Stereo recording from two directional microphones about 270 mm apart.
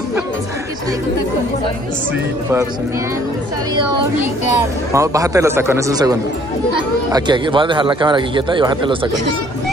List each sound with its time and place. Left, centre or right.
4.9 s speech: centre